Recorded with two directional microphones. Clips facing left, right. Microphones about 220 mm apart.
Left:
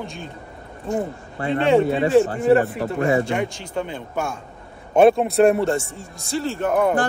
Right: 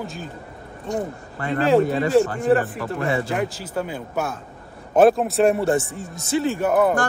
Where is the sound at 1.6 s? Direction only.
Centre (ahead or behind).